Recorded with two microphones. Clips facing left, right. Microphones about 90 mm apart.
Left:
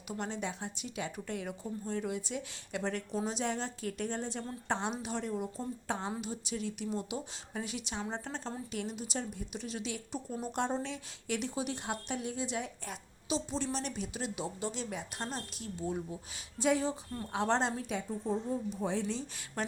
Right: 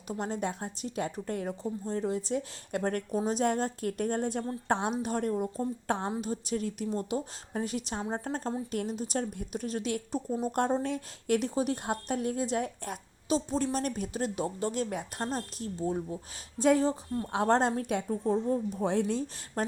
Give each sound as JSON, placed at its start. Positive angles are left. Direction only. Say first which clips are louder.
{"t": 0.1, "sound": "a woman's voice", "louder": "right 5 dB", "side_deg": -40}
{"t": 6.1, "sound": "a woman's voice", "louder": "right 6 dB", "side_deg": -40}